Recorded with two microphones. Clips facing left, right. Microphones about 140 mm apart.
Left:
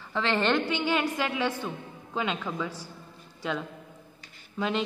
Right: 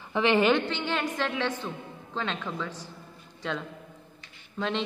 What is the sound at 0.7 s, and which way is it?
A woman's voice, 10° left (ahead or behind).